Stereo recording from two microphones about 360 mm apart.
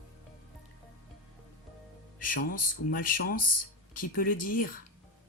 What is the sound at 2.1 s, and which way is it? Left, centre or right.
Speech, left.